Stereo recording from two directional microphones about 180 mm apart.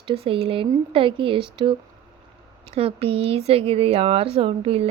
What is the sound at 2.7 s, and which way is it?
A woman's voice, 30° right (ahead or behind).